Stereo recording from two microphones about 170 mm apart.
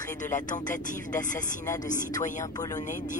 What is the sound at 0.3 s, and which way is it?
Music, 50° left (ahead or behind).